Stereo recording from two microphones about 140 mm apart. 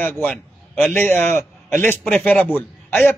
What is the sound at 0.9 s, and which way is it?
A man's voice, 15° left (ahead or behind).